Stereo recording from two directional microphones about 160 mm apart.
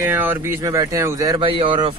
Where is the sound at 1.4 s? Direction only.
35° right (ahead or behind).